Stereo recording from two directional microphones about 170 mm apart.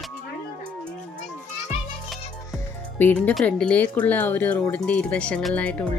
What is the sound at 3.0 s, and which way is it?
Speech, 10° left (ahead or behind).